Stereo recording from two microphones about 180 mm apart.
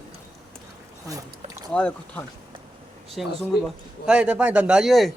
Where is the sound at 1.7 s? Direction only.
10° left (ahead or behind).